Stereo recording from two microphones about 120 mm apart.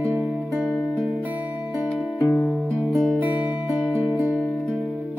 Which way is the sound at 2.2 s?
15° left (ahead or behind).